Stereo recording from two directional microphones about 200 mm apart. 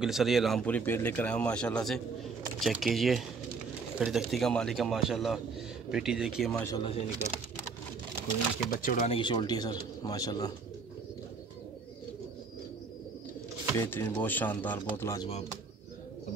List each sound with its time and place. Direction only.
0.0 s speech: centre (ahead or behind)
6.6 s speech: 20° left (ahead or behind)
8.7 s speech: 45° left (ahead or behind)
9.1 s speech: 25° left (ahead or behind)
13.7 s speech: 10° left (ahead or behind)